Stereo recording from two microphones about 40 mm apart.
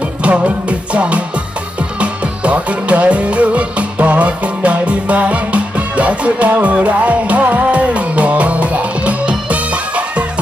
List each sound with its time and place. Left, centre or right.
0.2 s music: right